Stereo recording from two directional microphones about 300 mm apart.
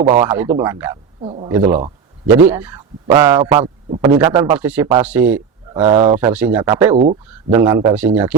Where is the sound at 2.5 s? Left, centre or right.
Centre.